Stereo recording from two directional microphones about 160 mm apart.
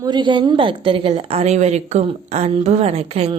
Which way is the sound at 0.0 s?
30° right (ahead or behind).